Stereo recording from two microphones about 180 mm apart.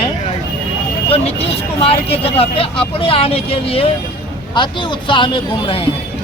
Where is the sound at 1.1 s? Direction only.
35° left (ahead or behind).